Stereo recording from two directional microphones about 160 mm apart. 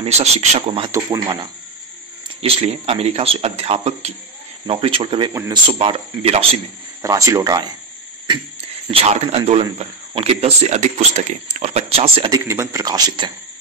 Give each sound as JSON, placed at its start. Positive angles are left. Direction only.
{"t": 0.0, "sound": "a man's voice", "side_deg": -45}
{"t": 0.9, "sound": "a man's voice", "side_deg": -25}
{"t": 2.4, "sound": "a man's voice", "side_deg": -40}
{"t": 7.0, "sound": "a man's voice", "side_deg": -20}
{"t": 8.9, "sound": "a man's voice", "side_deg": -40}
{"t": 12.3, "sound": "a man's voice", "side_deg": -20}